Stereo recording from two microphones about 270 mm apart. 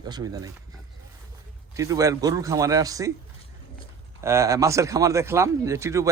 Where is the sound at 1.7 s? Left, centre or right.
Centre.